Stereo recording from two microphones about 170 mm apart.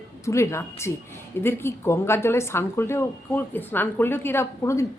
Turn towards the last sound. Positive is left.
turn(degrees=15)  # may be behind; listen again after turning